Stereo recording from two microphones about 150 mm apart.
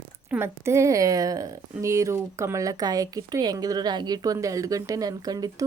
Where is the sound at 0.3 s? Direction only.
15° right (ahead or behind).